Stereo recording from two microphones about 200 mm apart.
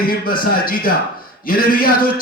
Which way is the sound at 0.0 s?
45° left (ahead or behind).